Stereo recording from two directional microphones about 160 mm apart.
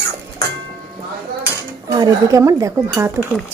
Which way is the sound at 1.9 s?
20° right (ahead or behind).